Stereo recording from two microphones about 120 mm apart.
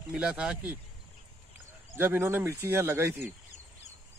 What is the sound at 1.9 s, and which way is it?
Speech, 15° right (ahead or behind).